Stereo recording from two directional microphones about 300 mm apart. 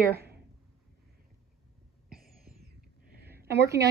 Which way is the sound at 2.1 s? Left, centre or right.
Right.